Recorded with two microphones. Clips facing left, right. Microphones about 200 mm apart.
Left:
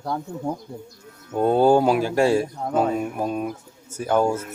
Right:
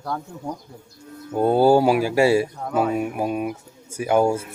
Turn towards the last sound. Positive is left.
turn(degrees=-10)  # may be behind; listen again after turning